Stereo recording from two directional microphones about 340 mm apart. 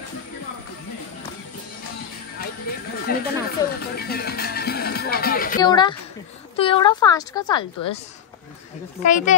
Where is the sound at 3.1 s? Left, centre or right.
Left.